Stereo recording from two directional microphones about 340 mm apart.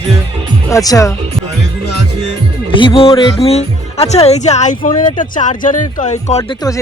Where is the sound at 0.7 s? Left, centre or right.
Centre.